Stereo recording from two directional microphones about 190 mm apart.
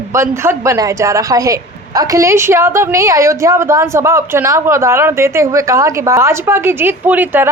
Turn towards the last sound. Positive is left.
turn(degrees=-10)  # may be behind; listen again after turning